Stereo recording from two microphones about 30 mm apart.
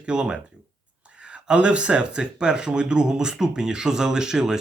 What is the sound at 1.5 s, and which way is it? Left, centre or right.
Speech, right.